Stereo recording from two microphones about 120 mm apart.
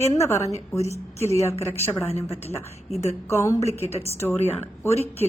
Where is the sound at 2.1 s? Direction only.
60° left (ahead or behind).